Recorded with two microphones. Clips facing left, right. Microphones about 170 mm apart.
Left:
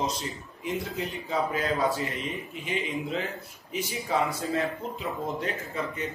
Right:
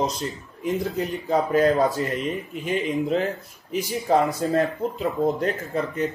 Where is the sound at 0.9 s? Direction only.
45° right (ahead or behind).